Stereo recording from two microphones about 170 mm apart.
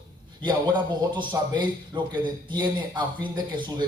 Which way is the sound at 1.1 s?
25° right (ahead or behind).